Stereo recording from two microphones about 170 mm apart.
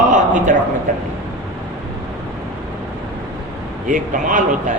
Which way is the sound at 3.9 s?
50° right (ahead or behind).